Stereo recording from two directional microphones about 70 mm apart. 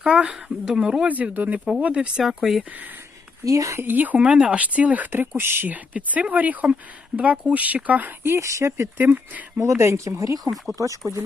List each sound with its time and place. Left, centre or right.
0.0 s speech: centre
1.0 s speech: right
2.2 s speech: centre
2.6 s speech: right
3.4 s speech: right
3.8 s speech: right
8.4 s speech: right
9.0 s speech: right
9.6 s speech: right